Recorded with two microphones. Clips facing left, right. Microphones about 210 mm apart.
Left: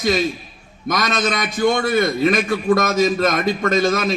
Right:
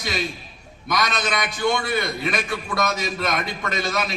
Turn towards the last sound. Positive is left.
turn(degrees=50)  # may be behind; listen again after turning